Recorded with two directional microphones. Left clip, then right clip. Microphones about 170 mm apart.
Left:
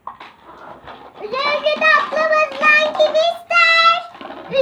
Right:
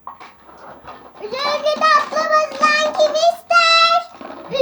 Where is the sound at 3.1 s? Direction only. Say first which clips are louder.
Even; 10° right (ahead or behind).